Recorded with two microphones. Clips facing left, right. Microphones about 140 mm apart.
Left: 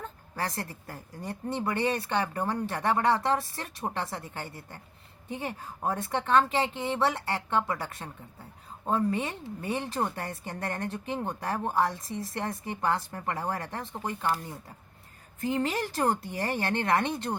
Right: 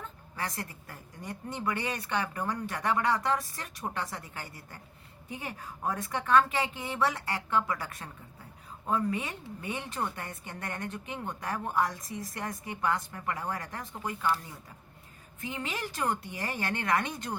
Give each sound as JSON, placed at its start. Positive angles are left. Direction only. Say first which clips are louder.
{"t": 0.0, "sound": "a woman's voice", "louder": "left 3 dB", "side_deg": 35}
{"t": 15.4, "sound": "a woman's voice", "louder": "left 8 dB", "side_deg": 40}